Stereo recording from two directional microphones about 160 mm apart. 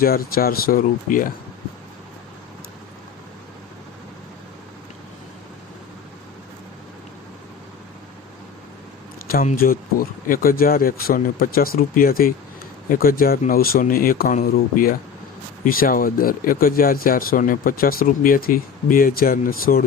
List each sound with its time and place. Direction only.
0.0 s speech: 70° left (ahead or behind)
9.2 s speech: 65° left (ahead or behind)